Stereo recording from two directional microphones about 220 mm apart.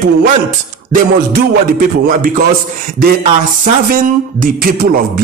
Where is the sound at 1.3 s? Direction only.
40° right (ahead or behind).